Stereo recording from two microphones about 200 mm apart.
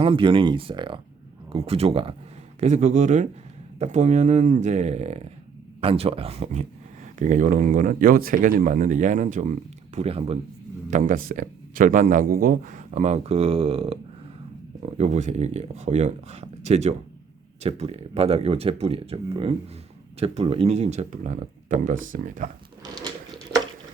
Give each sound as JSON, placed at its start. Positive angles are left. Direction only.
{"t": 0.0, "sound": "speech", "side_deg": -25}
{"t": 10.9, "sound": "speech", "side_deg": -40}
{"t": 22.8, "sound": "a sound", "side_deg": -20}